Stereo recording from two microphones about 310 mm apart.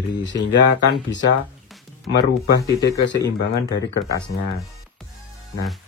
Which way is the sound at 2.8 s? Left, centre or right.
Left.